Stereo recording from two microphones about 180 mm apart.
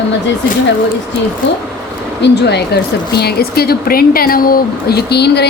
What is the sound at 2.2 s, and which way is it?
A woman's voice, 70° left (ahead or behind).